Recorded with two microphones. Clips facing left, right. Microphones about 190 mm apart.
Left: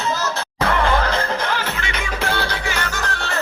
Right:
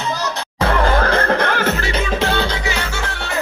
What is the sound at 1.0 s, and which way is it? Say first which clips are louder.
Music: right 5 dB; 55° right (ahead or behind).